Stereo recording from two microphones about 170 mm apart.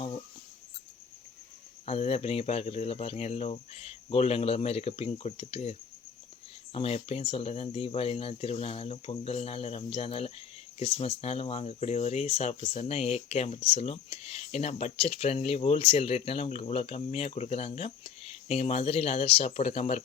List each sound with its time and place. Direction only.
1.8 s speech: 35° left (ahead or behind)
6.7 s speech: 35° left (ahead or behind)